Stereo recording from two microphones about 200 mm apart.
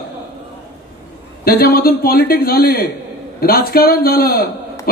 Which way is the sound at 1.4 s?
50° left (ahead or behind).